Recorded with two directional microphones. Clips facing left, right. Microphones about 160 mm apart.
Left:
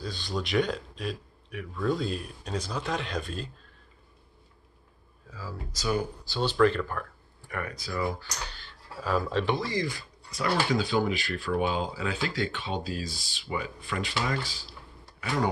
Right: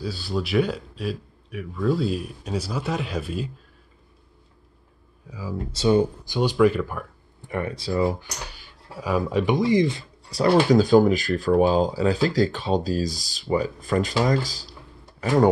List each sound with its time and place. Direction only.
0.0 s a man's voice: 5° right (ahead or behind)
5.3 s a man's voice: 15° right (ahead or behind)
5.7 s speech: 25° right (ahead or behind)
6.3 s a man's voice: 10° right (ahead or behind)
7.4 s speech: 25° right (ahead or behind)
8.5 s speech: 10° right (ahead or behind); by 15.4 s 40° right (ahead or behind)